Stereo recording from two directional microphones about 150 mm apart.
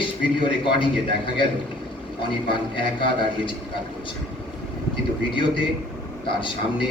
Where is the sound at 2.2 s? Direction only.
35° left (ahead or behind).